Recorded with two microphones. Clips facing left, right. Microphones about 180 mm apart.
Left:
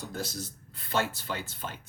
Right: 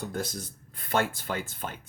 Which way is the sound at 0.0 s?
55° right (ahead or behind).